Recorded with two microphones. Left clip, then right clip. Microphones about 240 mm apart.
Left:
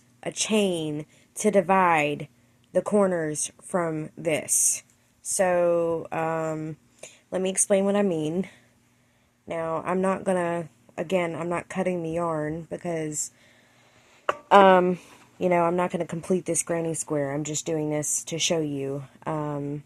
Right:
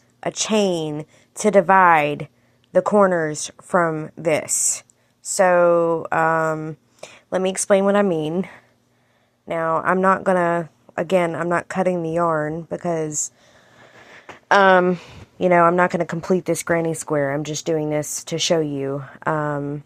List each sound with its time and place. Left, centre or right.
0.2 s speech: centre
14.4 s speech: centre